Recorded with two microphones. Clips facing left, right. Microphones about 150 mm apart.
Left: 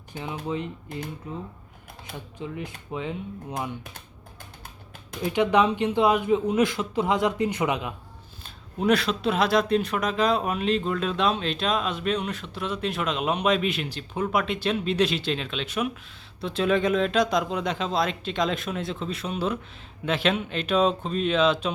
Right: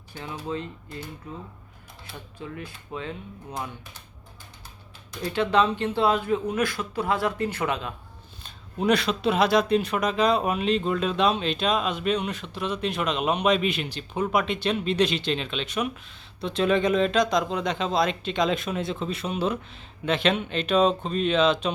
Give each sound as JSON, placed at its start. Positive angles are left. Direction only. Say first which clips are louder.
{"t": 0.1, "sound": "speech", "louder": "left 2 dB", "side_deg": 15}
{"t": 5.2, "sound": "speech", "louder": "left 1 dB", "side_deg": 15}
{"t": 8.4, "sound": "speech", "louder": "left 1 dB", "side_deg": 0}